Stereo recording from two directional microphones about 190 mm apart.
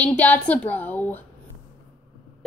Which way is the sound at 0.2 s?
10° left (ahead or behind).